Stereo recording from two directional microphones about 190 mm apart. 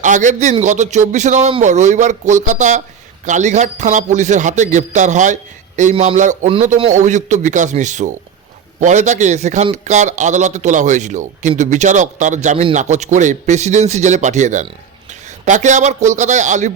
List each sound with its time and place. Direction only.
0.0 s a man's voice: 40° right (ahead or behind)